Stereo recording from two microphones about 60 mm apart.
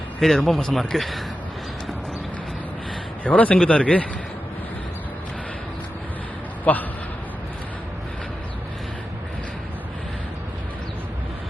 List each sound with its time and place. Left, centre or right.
0.2 s speech: centre
3.2 s speech: left
6.7 s speech: left